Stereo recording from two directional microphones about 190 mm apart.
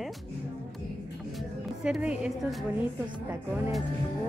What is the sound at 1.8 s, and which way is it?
A woman's voice, 5° right (ahead or behind).